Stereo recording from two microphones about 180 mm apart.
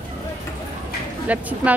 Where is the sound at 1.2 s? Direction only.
10° right (ahead or behind).